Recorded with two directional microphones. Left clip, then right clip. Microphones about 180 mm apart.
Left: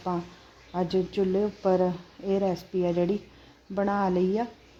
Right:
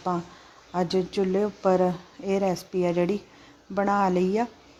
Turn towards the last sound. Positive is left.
turn(degrees=-15)  # may be behind; listen again after turning